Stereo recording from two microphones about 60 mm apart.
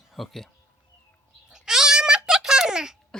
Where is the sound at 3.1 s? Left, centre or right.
Centre.